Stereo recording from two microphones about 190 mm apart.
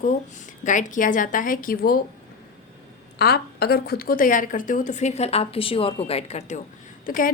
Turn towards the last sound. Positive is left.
turn(degrees=45)  # may be behind; listen again after turning